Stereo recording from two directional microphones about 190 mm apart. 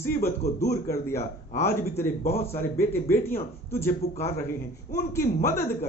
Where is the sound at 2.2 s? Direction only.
30° left (ahead or behind).